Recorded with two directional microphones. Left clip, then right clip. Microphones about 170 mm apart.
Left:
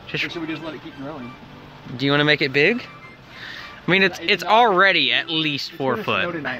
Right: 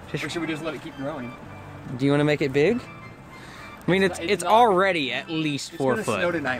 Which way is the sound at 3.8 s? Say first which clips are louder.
Left 4 dB; 10° right (ahead or behind).